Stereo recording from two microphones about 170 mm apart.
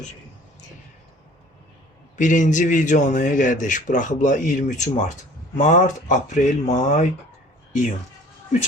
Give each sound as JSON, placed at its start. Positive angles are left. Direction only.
{"t": 2.1, "sound": "a man's voice", "side_deg": 45}